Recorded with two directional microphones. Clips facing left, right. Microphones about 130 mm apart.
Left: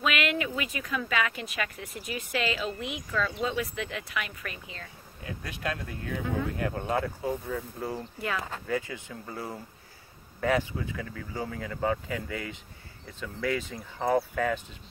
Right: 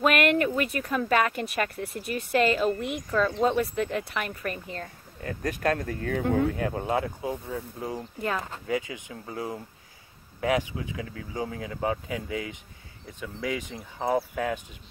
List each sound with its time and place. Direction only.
0.0 s a sound: 50° right (ahead or behind)
0.9 s speech: 45° right (ahead or behind)
3.1 s speech: 35° right (ahead or behind)
6.6 s speech: 25° right (ahead or behind)
13.9 s speech: 5° right (ahead or behind)